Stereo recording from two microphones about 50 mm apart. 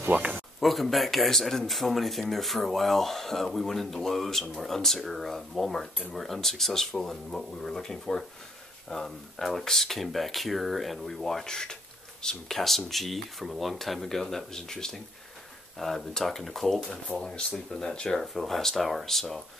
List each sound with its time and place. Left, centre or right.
0.0 s a sound: right
0.6 s speech: centre
16.1 s speech: centre
18.2 s speech: centre